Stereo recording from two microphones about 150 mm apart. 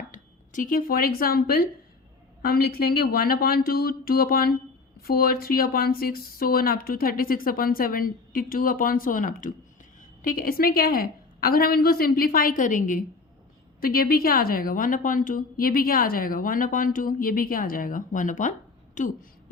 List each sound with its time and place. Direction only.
0.1 s a woman's voice: 60° left (ahead or behind)
10.2 s a woman's voice: 70° left (ahead or behind)
13.8 s a woman's voice: 85° left; by 19.1 s 55° left (ahead or behind)